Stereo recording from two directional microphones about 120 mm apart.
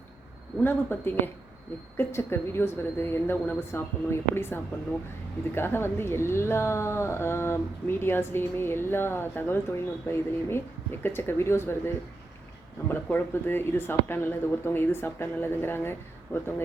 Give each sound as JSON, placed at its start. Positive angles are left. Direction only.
{"t": 0.6, "sound": "a woman's voice", "side_deg": 20}